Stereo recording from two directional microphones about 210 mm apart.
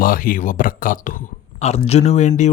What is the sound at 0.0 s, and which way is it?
Speech, 40° left (ahead or behind).